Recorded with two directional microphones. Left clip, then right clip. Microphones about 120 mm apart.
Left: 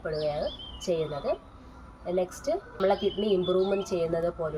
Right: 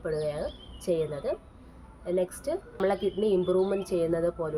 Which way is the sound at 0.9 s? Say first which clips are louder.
Even; 15° right (ahead or behind).